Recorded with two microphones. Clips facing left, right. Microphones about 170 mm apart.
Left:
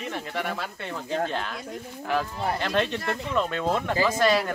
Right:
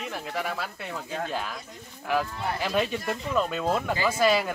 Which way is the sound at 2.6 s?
5° right (ahead or behind).